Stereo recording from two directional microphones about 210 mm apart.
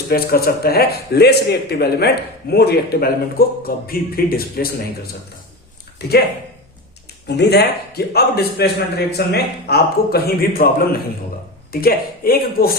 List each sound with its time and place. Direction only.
0.1 s a man's voice: 45° left (ahead or behind)
7.3 s a man's voice: 50° left (ahead or behind)